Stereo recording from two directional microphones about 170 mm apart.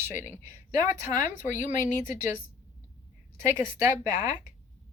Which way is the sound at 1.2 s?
45° left (ahead or behind).